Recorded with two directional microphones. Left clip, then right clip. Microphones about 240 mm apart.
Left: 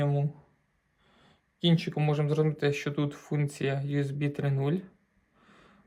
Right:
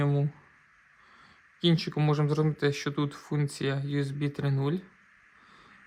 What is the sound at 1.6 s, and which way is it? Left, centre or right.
Speech, centre.